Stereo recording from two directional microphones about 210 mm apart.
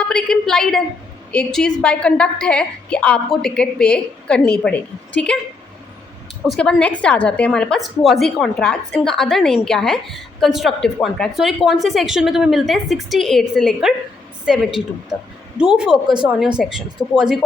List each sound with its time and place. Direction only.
0.1 s a woman's voice: 5° left (ahead or behind)
6.5 s a woman's voice: 5° left (ahead or behind)